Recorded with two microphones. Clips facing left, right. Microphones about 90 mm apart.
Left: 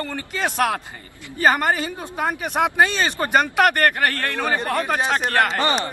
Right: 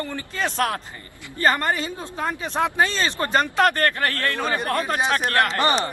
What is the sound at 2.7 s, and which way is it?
Speech, 70° left (ahead or behind).